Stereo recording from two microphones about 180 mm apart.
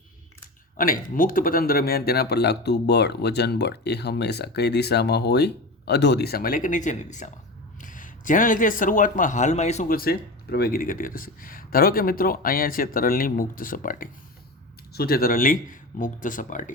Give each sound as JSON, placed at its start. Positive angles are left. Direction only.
{"t": 0.8, "sound": "a man's voice", "side_deg": 50}
{"t": 9.9, "sound": "speech", "side_deg": 55}